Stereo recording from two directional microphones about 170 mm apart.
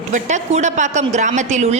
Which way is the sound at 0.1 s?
45° right (ahead or behind).